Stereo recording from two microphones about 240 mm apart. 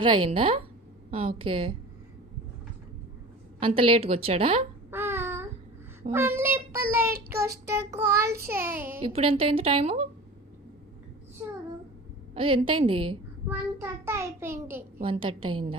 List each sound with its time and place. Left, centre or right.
0.0 s a woman's voice: right
3.6 s a woman's voice: right
4.9 s child singing: centre
9.0 s a woman's voice: right
12.3 s a woman's voice: right
13.5 s child singing: centre
15.0 s a woman's voice: right